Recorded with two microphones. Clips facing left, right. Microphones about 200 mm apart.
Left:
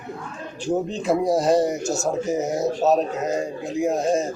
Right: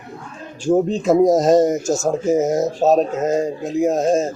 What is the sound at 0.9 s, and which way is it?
Speech, 45° right (ahead or behind).